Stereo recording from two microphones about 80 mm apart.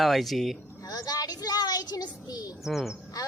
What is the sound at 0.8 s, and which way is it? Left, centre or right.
Child singing, left.